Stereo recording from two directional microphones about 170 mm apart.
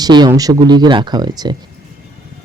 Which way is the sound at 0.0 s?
25° right (ahead or behind).